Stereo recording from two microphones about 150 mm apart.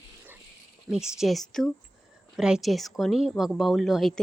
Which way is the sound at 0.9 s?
5° right (ahead or behind).